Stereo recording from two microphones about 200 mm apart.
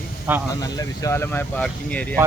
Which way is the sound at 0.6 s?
15° left (ahead or behind).